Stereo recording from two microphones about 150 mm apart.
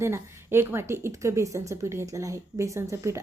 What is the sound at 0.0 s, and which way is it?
A woman's voice, 15° right (ahead or behind).